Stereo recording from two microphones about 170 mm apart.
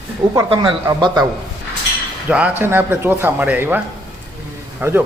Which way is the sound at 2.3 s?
10° right (ahead or behind).